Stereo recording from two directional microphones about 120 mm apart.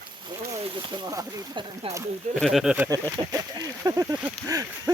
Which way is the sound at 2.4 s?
Centre (ahead or behind).